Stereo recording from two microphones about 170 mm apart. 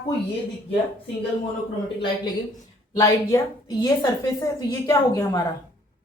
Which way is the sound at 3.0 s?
15° left (ahead or behind).